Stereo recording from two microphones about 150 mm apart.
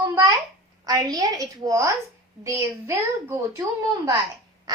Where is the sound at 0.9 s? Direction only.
25° right (ahead or behind).